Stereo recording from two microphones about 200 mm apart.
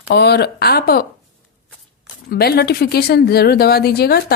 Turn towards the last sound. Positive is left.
turn(degrees=55)  # may be behind; listen again after turning